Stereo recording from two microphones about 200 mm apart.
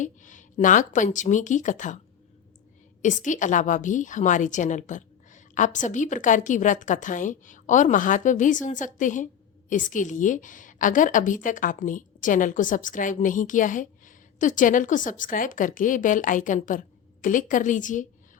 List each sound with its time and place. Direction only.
0.0 s a woman's voice: 40° left (ahead or behind)
3.0 s a woman's voice: 40° left (ahead or behind)